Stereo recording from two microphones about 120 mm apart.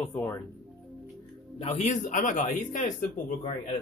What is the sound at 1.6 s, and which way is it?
Speech, 65° left (ahead or behind).